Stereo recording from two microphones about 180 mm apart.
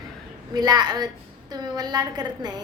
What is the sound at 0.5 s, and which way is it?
A woman's voice, 20° right (ahead or behind).